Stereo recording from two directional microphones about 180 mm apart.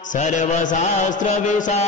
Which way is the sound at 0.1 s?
40° left (ahead or behind).